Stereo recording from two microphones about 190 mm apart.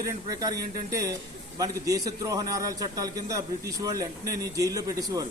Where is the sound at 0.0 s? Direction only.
20° right (ahead or behind).